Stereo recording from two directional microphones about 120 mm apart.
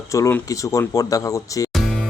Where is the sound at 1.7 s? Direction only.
Centre (ahead or behind).